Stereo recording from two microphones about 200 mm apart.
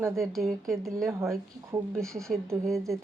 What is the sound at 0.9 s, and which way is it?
Speech, 15° right (ahead or behind).